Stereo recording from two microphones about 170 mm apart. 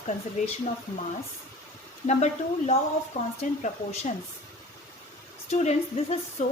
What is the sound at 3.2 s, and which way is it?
Speech, 50° left (ahead or behind).